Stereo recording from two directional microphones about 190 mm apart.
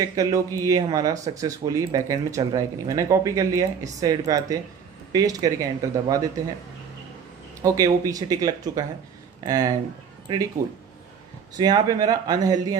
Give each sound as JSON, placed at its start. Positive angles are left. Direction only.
{"t": 0.2, "sound": "speech", "side_deg": -15}
{"t": 7.9, "sound": "speech", "side_deg": -20}
{"t": 11.5, "sound": "speech", "side_deg": -20}